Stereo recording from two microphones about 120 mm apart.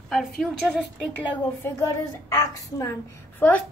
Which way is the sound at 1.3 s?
25° left (ahead or behind).